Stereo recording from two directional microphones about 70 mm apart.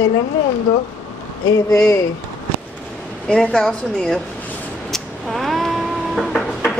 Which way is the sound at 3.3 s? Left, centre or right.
Centre.